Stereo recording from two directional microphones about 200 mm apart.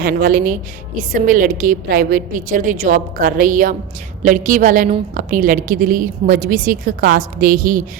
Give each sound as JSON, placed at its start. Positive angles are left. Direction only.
{"t": 0.0, "sound": "a woman's voice", "side_deg": -45}